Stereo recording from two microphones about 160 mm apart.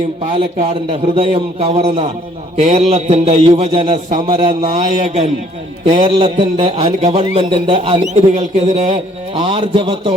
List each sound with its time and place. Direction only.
0.9 s a man's voice: 35° right (ahead or behind)
8.1 s a man's voice: 50° right (ahead or behind)